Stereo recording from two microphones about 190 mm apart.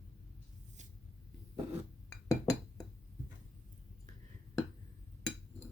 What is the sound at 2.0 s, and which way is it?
Chink, 20° left (ahead or behind).